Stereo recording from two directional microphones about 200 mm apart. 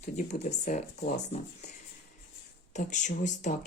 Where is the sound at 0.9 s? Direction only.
55° left (ahead or behind).